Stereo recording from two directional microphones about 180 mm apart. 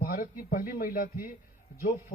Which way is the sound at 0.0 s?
50° left (ahead or behind).